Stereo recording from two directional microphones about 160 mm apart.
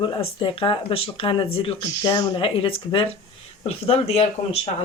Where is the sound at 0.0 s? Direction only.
35° left (ahead or behind).